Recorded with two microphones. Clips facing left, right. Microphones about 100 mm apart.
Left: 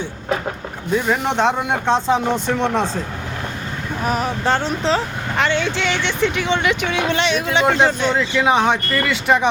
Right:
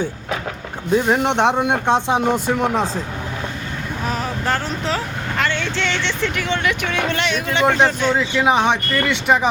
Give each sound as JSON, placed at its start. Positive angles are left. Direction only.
{"t": 1.0, "sound": "speech", "side_deg": -25}
{"t": 4.4, "sound": "speech", "side_deg": 25}
{"t": 8.1, "sound": "speech", "side_deg": -5}